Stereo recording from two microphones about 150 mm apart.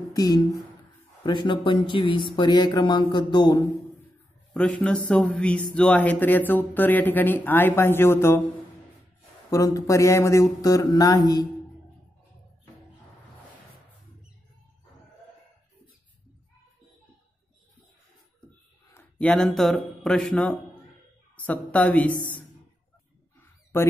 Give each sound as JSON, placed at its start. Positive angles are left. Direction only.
{"t": 0.1, "sound": "speech", "side_deg": 25}
{"t": 4.6, "sound": "speech", "side_deg": 10}
{"t": 9.5, "sound": "speech", "side_deg": 20}
{"t": 18.9, "sound": "speech", "side_deg": 10}
{"t": 23.4, "sound": "owl", "side_deg": 15}